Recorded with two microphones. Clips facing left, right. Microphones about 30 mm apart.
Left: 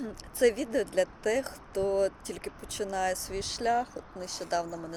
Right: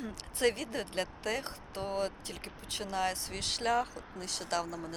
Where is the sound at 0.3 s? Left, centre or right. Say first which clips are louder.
Left 6 dB; right.